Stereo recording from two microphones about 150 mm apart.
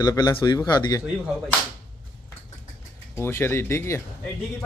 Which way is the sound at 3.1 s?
15° left (ahead or behind).